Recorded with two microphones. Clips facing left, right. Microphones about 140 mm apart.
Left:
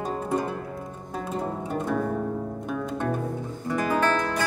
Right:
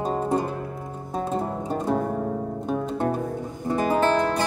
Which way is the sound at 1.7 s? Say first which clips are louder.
Right 3 dB; 30° right (ahead or behind).